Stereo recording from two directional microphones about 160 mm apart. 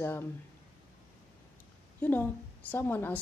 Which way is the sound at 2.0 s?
10° left (ahead or behind).